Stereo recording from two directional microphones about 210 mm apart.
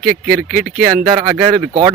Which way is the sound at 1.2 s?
15° right (ahead or behind).